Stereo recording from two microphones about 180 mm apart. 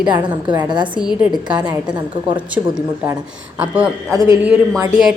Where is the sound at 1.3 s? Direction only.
25° right (ahead or behind).